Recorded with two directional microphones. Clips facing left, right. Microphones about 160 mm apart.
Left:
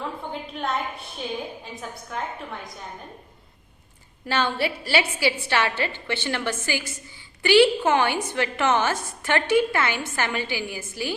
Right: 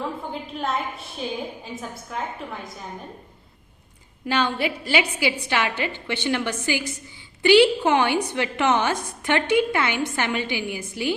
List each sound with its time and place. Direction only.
0.5 s a woman's voice: centre (ahead or behind)
4.3 s a woman's voice: 15° right (ahead or behind)